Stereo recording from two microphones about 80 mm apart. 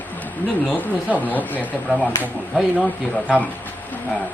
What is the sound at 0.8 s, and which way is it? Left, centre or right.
Speech, left.